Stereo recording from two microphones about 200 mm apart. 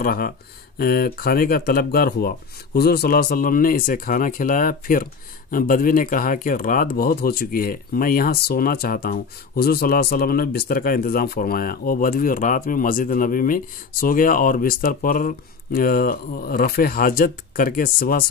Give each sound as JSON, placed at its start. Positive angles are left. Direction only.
{"t": 0.0, "sound": "speech", "side_deg": 45}